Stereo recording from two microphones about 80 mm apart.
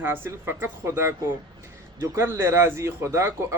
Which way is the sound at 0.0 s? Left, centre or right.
Right.